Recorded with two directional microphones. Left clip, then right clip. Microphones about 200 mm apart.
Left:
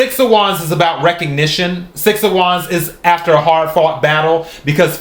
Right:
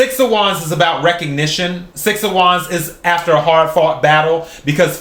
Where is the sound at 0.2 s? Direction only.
20° left (ahead or behind).